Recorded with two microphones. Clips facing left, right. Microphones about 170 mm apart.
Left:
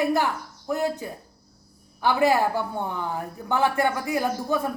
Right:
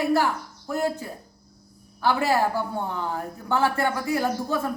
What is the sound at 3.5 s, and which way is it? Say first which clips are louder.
A man's voice: left 1 dB; 15° left (ahead or behind).